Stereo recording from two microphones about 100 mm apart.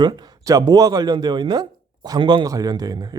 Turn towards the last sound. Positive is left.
turn(degrees=-40)  # may be behind; listen again after turning